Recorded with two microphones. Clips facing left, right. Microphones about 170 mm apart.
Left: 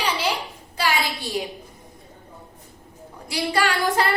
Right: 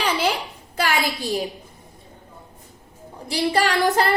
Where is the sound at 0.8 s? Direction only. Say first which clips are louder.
Right 2 dB; 50° right (ahead or behind).